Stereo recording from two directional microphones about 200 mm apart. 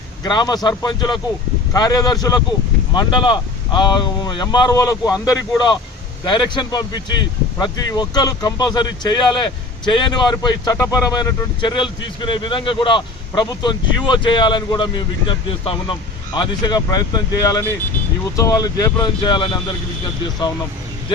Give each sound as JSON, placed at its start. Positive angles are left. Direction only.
{"t": 0.3, "sound": "speech", "side_deg": 20}